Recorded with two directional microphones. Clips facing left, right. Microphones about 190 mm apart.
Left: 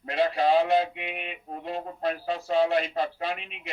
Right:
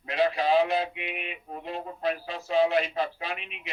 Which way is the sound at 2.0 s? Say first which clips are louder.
Left 2 dB; 40° left (ahead or behind).